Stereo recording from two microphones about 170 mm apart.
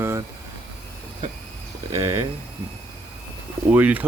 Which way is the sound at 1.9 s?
15° right (ahead or behind).